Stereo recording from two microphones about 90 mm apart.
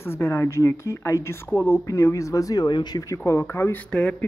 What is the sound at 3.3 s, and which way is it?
Speech, 35° left (ahead or behind).